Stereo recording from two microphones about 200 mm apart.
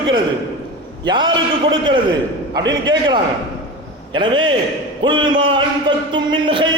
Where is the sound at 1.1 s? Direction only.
20° right (ahead or behind).